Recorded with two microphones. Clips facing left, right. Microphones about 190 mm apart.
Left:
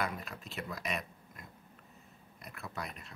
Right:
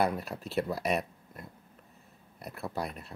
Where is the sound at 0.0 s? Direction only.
35° right (ahead or behind).